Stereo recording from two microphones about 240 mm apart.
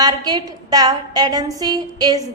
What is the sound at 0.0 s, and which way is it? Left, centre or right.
A woman's voice, centre.